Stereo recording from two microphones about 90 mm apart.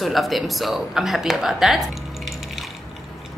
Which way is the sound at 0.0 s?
Centre (ahead or behind).